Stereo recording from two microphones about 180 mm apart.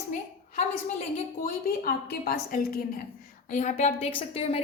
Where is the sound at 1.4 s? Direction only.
55° left (ahead or behind).